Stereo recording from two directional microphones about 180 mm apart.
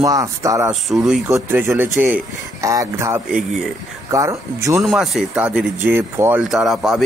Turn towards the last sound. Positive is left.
turn(degrees=0)  # may be behind; listen again after turning